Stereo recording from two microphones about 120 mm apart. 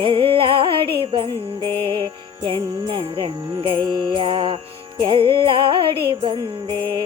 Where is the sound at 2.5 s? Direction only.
45° right (ahead or behind).